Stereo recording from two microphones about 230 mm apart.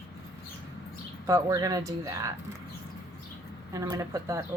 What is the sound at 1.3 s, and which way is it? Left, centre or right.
Speech, centre.